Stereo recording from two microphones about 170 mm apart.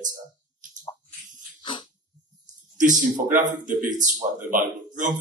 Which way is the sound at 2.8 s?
50° right (ahead or behind).